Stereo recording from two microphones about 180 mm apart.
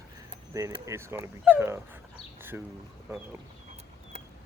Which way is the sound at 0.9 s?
15° right (ahead or behind).